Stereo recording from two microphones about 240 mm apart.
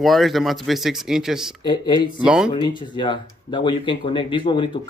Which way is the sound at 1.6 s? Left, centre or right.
Centre.